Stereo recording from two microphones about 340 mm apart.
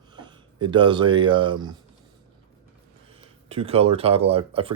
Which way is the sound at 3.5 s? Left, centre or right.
Centre.